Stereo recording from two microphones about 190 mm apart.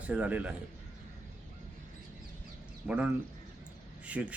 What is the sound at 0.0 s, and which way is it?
Speech, 5° right (ahead or behind).